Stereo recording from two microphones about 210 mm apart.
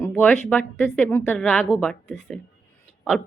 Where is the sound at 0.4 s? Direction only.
5° left (ahead or behind).